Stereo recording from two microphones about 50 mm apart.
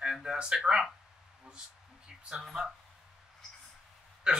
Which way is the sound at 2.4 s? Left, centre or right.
Centre.